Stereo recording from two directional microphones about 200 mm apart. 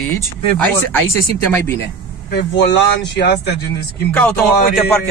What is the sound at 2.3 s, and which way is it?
Speech, 55° left (ahead or behind).